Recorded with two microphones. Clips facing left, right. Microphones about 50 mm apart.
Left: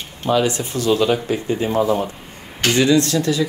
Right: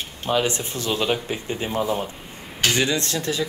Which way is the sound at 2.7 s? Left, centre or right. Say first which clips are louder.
Left 12 dB; right.